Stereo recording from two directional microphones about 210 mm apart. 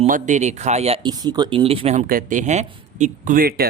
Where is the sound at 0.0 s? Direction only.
35° right (ahead or behind).